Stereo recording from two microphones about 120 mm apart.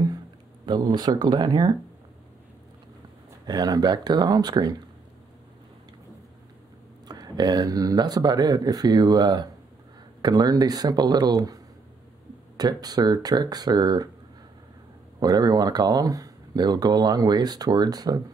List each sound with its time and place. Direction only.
0.7 s speech: 35° right (ahead or behind)
3.4 s speech: 35° right (ahead or behind)
7.1 s speech: 35° right (ahead or behind)
15.1 s speech: 35° right (ahead or behind)